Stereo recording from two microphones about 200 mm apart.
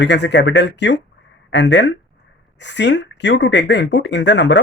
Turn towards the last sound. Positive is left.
turn(degrees=60)  # may be behind; listen again after turning